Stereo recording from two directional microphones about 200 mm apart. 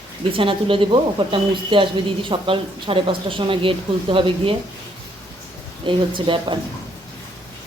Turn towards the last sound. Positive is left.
turn(degrees=-25)  # may be behind; listen again after turning